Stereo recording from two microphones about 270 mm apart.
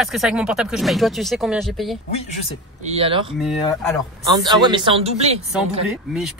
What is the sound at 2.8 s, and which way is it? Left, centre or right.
Speech, right.